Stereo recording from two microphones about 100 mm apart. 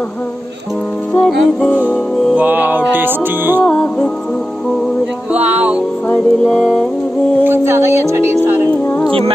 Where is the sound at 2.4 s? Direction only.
15° right (ahead or behind).